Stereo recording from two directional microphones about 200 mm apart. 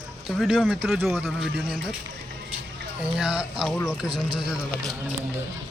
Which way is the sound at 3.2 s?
5° right (ahead or behind).